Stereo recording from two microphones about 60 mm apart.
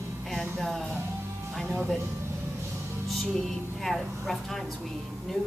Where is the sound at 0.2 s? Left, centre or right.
Centre.